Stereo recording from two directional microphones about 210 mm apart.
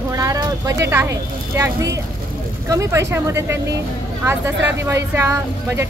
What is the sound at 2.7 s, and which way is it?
Speech, 15° right (ahead or behind).